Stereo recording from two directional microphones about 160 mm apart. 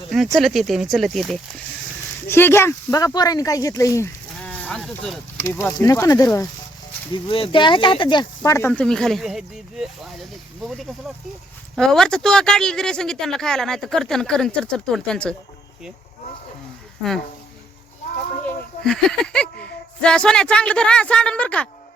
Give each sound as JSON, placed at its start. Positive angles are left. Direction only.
{"t": 0.3, "sound": "speech", "side_deg": 0}
{"t": 2.2, "sound": "speech", "side_deg": 15}
{"t": 4.4, "sound": "speech", "side_deg": 10}
{"t": 5.4, "sound": "speech", "side_deg": 20}
{"t": 7.1, "sound": "speech", "side_deg": 35}
{"t": 8.4, "sound": "speech", "side_deg": 15}
{"t": 18.4, "sound": "speech", "side_deg": 5}